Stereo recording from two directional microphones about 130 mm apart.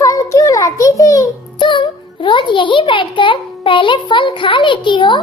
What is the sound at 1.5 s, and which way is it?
A child's voice, 40° left (ahead or behind).